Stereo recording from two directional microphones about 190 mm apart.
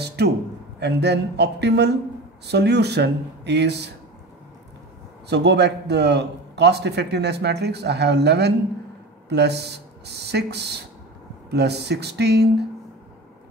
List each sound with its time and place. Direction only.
0.0 s a sound: 60° right (ahead or behind)
0.7 s a man's voice: 65° right (ahead or behind)
5.3 s a man's voice: 65° right (ahead or behind)